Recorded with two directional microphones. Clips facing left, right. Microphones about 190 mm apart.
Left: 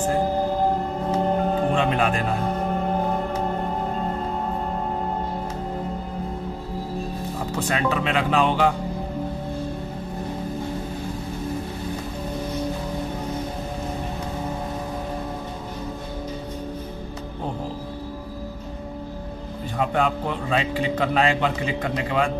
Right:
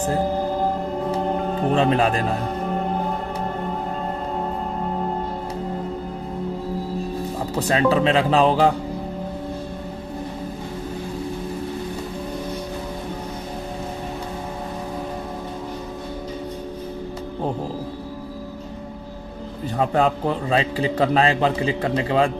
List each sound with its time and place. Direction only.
1.7 s a man's voice: 35° right (ahead or behind)
7.5 s a man's voice: 35° right (ahead or behind)
19.8 s a man's voice: 40° right (ahead or behind)